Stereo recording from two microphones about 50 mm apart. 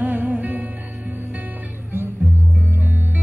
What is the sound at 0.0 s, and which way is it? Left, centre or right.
Music, right.